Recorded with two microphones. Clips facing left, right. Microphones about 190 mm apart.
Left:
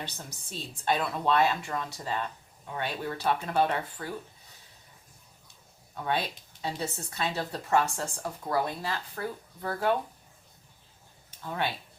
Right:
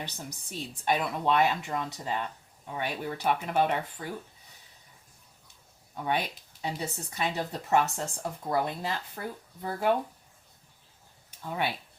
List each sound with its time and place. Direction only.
0.0 s speech: 15° right (ahead or behind)
5.9 s speech: 15° right (ahead or behind)
11.4 s speech: 10° right (ahead or behind)